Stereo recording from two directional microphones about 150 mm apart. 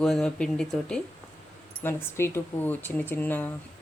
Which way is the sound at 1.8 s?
15° left (ahead or behind).